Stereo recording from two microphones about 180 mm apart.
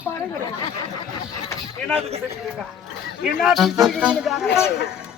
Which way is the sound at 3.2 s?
Centre (ahead or behind).